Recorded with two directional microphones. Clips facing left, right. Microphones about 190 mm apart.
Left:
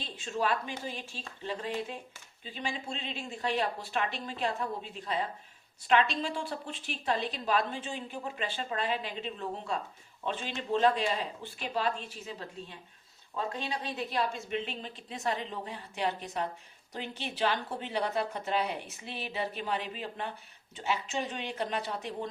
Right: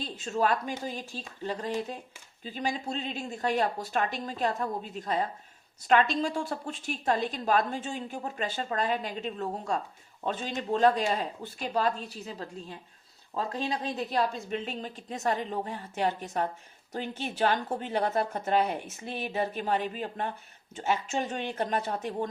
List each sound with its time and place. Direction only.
0.0 s a woman's voice: 40° right (ahead or behind)